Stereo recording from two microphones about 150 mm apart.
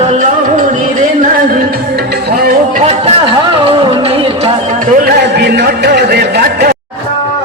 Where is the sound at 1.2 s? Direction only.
70° right (ahead or behind).